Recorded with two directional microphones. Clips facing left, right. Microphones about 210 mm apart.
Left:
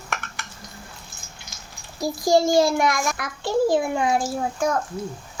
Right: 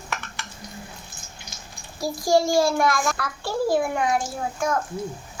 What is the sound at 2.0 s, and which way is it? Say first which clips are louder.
A child's voice: left 2 dB; 20° left (ahead or behind).